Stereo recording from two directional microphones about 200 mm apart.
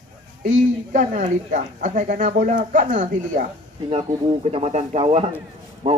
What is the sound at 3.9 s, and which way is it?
Speech, 30° right (ahead or behind).